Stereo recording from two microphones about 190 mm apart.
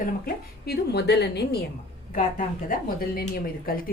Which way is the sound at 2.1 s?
45° left (ahead or behind).